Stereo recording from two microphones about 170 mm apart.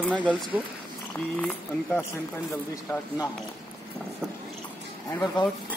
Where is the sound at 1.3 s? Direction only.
10° left (ahead or behind).